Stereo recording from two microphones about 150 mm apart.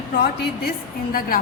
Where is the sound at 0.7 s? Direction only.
75° left (ahead or behind).